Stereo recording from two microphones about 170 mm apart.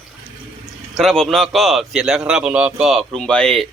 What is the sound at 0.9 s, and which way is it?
A man's voice, centre (ahead or behind).